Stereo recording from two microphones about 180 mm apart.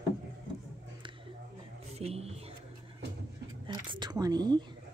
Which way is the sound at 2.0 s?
35° right (ahead or behind).